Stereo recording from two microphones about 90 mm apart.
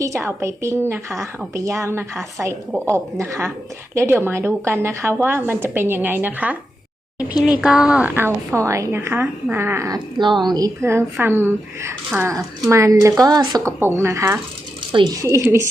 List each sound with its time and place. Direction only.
0.0 s a woman's voice: 35° right (ahead or behind); by 8.1 s 10° right (ahead or behind)
8.1 s speech: 25° right (ahead or behind)
9.9 s speech: 60° right (ahead or behind)
10.8 s a woman's voice: 30° right (ahead or behind); by 13.7 s 45° right (ahead or behind)
13.7 s a woman's voice: 25° right (ahead or behind)